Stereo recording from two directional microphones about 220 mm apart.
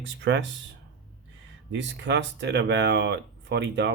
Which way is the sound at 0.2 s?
55° right (ahead or behind).